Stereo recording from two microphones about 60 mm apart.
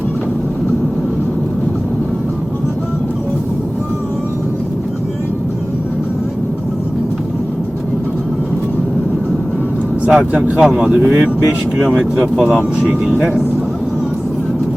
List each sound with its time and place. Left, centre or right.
10.1 s speech: centre
11.0 s speech: right
11.8 s speech: centre